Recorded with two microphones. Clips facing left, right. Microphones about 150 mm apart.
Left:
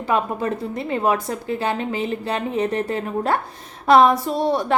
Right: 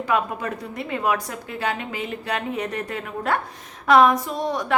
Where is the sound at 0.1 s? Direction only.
30° left (ahead or behind).